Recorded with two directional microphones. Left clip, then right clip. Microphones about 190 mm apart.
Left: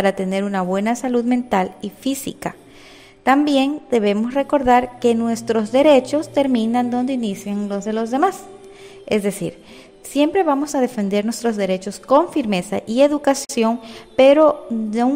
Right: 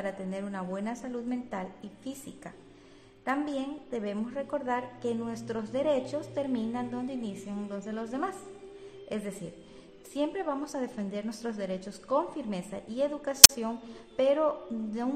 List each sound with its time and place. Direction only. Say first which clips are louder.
0.0 s a woman's voice: left 17 dB; 40° left (ahead or behind)
10.1 s a woman's voice: left 15 dB; 40° left (ahead or behind)